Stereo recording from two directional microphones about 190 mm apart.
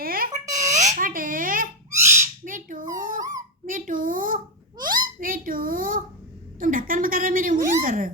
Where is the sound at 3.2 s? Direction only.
20° right (ahead or behind).